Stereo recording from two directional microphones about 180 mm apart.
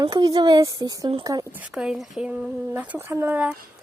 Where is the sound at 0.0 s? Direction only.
20° right (ahead or behind).